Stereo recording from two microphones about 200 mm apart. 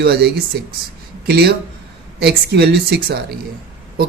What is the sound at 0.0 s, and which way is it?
Speech, 55° right (ahead or behind).